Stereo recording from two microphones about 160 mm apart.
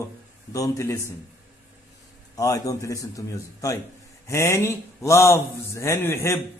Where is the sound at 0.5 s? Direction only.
20° left (ahead or behind).